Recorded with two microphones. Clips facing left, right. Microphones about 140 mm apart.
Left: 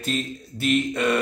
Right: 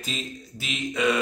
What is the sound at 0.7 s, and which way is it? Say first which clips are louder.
Speech: left 2 dB; centre (ahead or behind).